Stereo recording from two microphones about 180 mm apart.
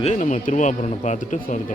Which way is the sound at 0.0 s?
40° left (ahead or behind).